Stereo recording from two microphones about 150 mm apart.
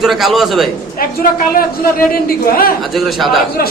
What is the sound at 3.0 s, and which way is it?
Speech, centre (ahead or behind).